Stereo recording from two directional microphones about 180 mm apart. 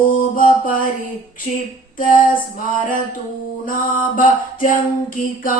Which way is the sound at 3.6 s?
50° left (ahead or behind).